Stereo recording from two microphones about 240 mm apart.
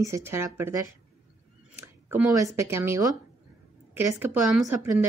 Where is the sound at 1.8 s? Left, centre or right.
Centre.